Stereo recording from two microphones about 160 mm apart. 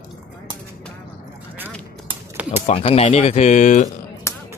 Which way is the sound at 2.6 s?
35° left (ahead or behind).